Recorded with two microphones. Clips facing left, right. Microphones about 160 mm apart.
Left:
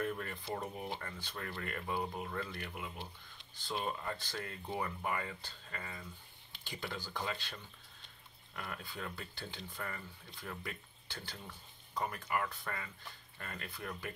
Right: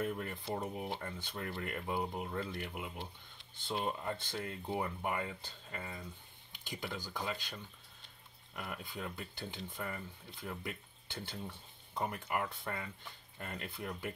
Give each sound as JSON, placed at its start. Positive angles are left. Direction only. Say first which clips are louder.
{"t": 0.0, "sound": "speech", "louder": "right 1 dB", "side_deg": -15}